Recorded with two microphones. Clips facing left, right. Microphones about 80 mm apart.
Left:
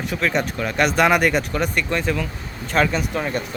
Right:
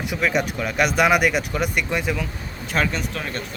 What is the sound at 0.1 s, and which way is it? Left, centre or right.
Speech, centre.